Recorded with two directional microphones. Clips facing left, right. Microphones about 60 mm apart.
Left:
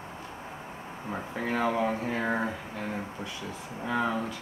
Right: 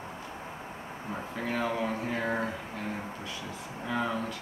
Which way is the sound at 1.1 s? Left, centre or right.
Centre.